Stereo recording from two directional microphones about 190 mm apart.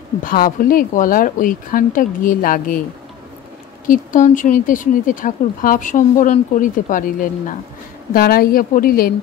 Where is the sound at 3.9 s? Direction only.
40° left (ahead or behind).